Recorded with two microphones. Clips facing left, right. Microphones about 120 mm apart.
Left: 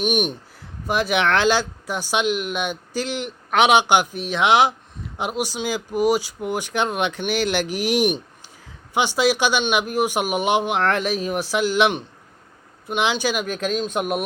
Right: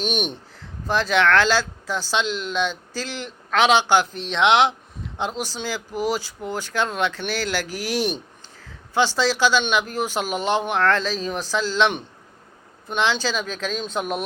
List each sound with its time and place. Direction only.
0.0 s speech: 10° left (ahead or behind)